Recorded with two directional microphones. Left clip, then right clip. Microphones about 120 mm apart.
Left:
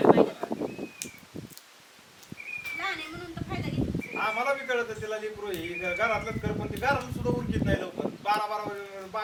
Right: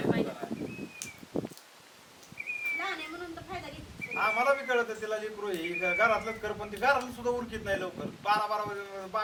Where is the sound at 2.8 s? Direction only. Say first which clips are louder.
Left 2 dB; 5° left (ahead or behind).